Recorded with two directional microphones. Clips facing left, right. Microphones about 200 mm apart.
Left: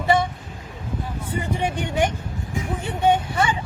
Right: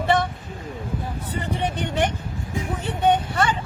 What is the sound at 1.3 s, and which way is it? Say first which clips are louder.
Speech: left 2 dB; 10° left (ahead or behind).